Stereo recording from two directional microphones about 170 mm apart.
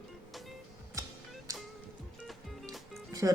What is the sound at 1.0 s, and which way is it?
Music, 20° right (ahead or behind).